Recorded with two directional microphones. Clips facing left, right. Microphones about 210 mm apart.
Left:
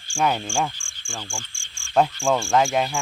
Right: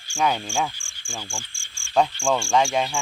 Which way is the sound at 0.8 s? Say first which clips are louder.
Even; centre (ahead or behind).